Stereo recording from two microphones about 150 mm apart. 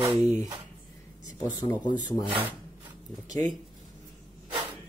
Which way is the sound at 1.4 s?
25° left (ahead or behind).